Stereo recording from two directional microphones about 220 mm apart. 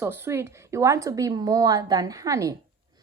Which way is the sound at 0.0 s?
10° right (ahead or behind).